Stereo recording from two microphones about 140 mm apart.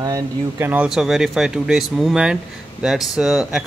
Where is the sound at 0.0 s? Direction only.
25° right (ahead or behind).